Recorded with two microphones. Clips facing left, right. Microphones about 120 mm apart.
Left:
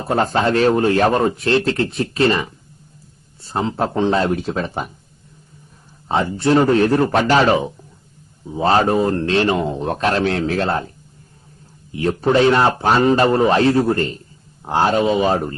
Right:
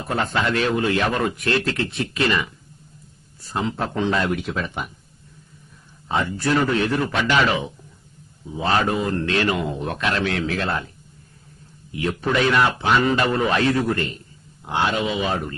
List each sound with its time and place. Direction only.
0.0 s speech: 35° left (ahead or behind)
6.1 s speech: 30° left (ahead or behind)
11.9 s speech: 35° left (ahead or behind)